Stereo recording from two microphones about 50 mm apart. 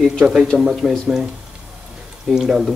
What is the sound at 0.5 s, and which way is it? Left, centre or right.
Speech, right.